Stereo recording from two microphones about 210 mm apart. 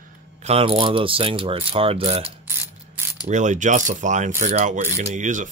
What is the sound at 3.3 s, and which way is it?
Speech, 35° right (ahead or behind).